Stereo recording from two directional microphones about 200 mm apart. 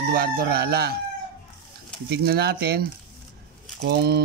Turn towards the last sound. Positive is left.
turn(degrees=-55)  # may be behind; listen again after turning